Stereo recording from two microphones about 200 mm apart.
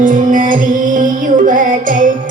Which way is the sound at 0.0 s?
40° right (ahead or behind).